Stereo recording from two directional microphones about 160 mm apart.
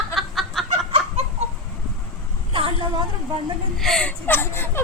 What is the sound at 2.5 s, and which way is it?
Vehicle, 35° right (ahead or behind).